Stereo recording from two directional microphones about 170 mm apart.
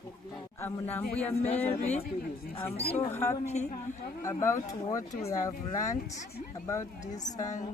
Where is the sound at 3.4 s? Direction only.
40° left (ahead or behind).